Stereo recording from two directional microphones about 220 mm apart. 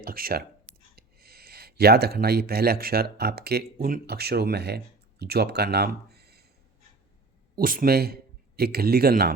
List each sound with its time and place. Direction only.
0.0 s speech: 40° right (ahead or behind)
7.5 s speech: 40° right (ahead or behind)